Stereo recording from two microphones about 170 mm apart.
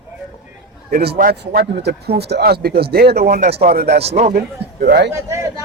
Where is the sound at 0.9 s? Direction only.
65° right (ahead or behind).